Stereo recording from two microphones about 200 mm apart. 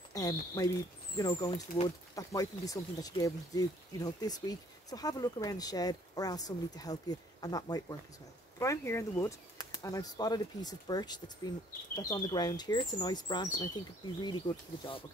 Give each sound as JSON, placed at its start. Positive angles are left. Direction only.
{"t": 0.1, "sound": "speech", "side_deg": 20}